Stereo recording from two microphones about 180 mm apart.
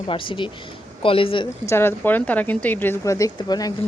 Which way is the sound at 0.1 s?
30° left (ahead or behind).